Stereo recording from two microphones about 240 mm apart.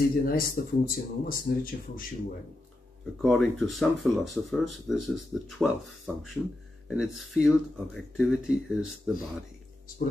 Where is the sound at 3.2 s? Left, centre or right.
Centre.